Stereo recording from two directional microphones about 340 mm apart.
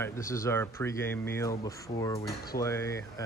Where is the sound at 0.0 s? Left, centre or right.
Centre.